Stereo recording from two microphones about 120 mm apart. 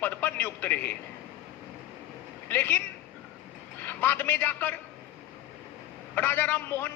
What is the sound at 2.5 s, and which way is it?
Speech, 15° left (ahead or behind).